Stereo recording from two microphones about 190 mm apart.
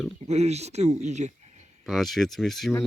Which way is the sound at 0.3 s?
35° right (ahead or behind).